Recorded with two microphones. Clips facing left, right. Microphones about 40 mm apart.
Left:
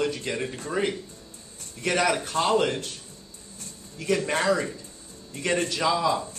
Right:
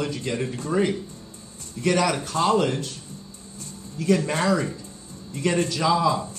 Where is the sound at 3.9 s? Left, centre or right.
Left.